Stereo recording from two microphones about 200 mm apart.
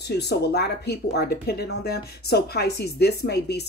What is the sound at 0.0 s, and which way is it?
Speech, 55° left (ahead or behind).